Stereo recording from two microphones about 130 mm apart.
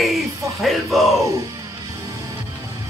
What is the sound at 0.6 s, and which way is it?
Music, centre (ahead or behind).